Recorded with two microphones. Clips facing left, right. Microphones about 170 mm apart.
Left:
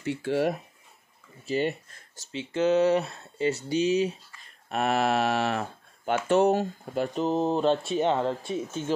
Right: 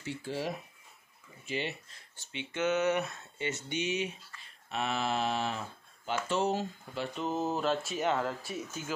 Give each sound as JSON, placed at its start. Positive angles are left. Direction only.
{"t": 0.0, "sound": "speech", "side_deg": 65}
{"t": 1.4, "sound": "speech", "side_deg": 45}
{"t": 2.3, "sound": "speech", "side_deg": 35}
{"t": 4.6, "sound": "speech", "side_deg": 55}
{"t": 7.2, "sound": "speech", "side_deg": 30}